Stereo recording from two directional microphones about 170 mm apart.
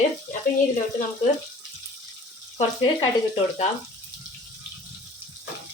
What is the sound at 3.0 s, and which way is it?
Speech, 30° left (ahead or behind).